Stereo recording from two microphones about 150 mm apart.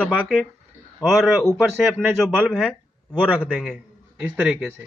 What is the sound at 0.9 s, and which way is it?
A man's voice, 5° left (ahead or behind).